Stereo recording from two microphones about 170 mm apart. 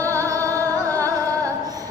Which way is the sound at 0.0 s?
20° right (ahead or behind).